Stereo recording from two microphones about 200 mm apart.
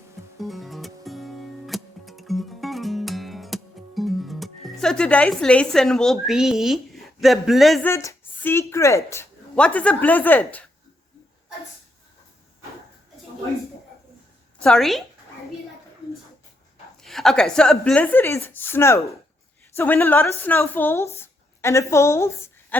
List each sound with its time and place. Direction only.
0.3 s music: centre (ahead or behind)
7.9 s speech: 10° left (ahead or behind)
14.6 s a woman's voice: centre (ahead or behind)
17.0 s a woman's voice: centre (ahead or behind)